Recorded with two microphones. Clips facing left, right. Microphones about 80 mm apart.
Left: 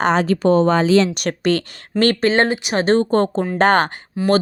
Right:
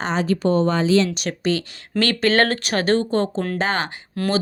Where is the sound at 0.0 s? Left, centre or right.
Left.